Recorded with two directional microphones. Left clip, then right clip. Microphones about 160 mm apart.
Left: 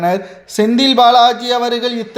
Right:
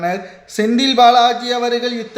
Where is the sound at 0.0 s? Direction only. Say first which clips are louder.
Left 5 dB; 30° left (ahead or behind).